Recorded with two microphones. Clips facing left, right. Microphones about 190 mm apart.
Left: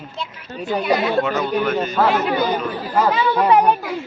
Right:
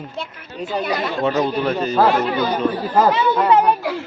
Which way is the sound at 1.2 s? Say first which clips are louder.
Right 1 dB; 35° right (ahead or behind).